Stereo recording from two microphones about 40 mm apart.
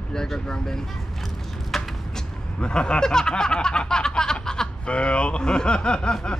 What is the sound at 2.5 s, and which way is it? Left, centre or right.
Speech, left.